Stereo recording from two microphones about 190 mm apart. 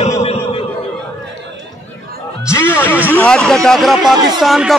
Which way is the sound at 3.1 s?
5° left (ahead or behind).